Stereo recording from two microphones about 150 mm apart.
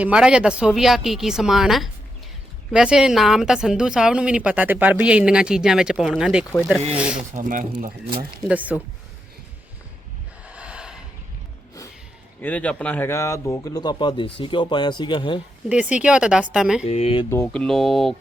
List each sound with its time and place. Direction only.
0.0 s a woman's voice: 5° right (ahead or behind)
7.3 s speech: 60° right (ahead or behind)
8.4 s speech: 10° right (ahead or behind)
10.4 s a sound: 10° right (ahead or behind)
12.4 s speech: 10° left (ahead or behind); by 15.4 s 35° left (ahead or behind)
15.7 s speech: 10° right (ahead or behind)
16.8 s speech: 45° left (ahead or behind)
17.2 s a woman's voice: 15° left (ahead or behind)